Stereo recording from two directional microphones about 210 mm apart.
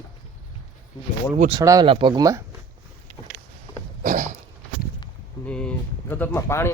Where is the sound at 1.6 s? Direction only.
15° right (ahead or behind).